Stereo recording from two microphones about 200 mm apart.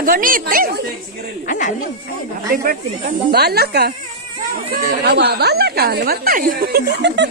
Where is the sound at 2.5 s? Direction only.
45° right (ahead or behind).